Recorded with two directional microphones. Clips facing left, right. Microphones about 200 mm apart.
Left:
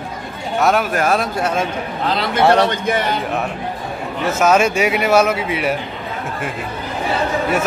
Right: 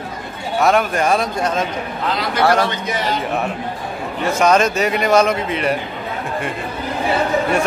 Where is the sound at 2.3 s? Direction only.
25° left (ahead or behind).